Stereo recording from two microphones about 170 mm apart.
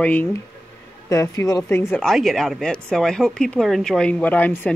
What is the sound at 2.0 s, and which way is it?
Speech, centre (ahead or behind).